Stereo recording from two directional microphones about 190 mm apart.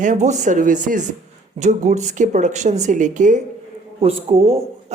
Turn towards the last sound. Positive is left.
turn(degrees=-30)  # may be behind; listen again after turning